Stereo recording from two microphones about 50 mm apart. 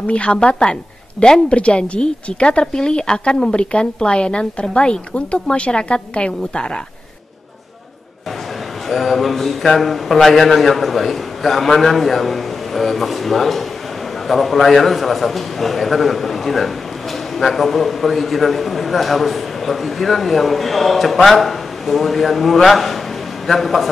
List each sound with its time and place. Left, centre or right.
0.0 s a woman's voice: left
8.8 s a man's voice: centre